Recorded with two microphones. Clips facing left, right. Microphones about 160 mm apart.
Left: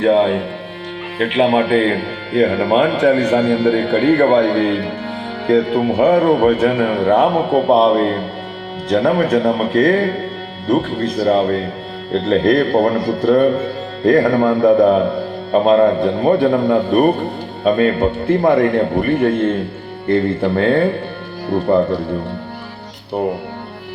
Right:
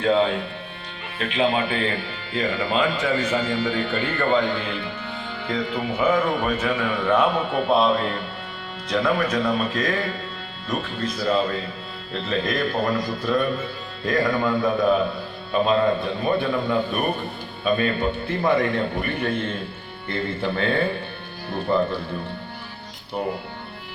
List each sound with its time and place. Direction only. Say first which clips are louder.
0.0 s a man's voice: left 7 dB; 60° left (ahead or behind); by 20.8 s 40° left (ahead or behind)